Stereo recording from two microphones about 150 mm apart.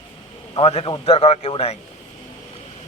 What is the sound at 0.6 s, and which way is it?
A man's voice, 40° left (ahead or behind).